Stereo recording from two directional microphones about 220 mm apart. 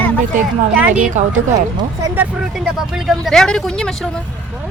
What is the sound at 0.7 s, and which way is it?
Speech, 5° right (ahead or behind).